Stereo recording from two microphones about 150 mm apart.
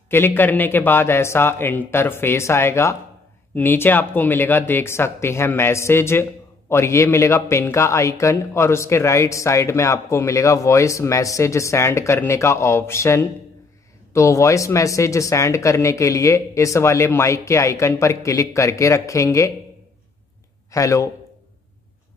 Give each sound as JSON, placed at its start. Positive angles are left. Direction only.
{"t": 0.1, "sound": "a man's voice", "side_deg": 15}
{"t": 20.7, "sound": "speech", "side_deg": 20}